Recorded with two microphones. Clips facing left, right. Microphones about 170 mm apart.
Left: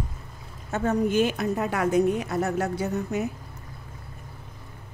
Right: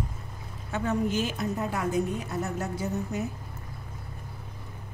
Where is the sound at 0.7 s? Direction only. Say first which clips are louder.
Left 4 dB; 50° left (ahead or behind); by 3.3 s 70° left (ahead or behind).